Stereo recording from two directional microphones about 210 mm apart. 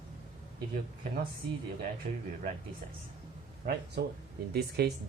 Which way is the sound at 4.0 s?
50° right (ahead or behind).